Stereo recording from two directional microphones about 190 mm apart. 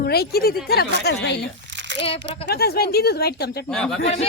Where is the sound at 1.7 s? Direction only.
70° right (ahead or behind).